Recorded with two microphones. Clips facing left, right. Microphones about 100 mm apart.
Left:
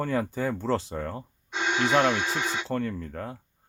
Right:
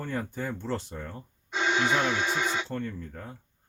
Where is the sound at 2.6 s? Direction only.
90° left.